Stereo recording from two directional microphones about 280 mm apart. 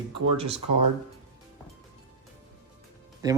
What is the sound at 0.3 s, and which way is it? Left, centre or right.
Speech, right.